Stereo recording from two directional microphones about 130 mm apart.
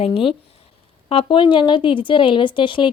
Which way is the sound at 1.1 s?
40° left (ahead or behind).